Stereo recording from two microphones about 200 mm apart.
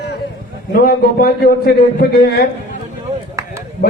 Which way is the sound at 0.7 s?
50° left (ahead or behind).